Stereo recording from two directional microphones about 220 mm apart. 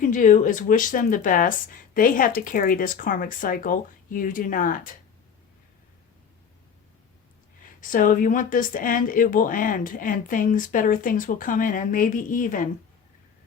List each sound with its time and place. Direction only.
0.0 s speech: 35° left (ahead or behind)
7.6 s speech: 40° left (ahead or behind)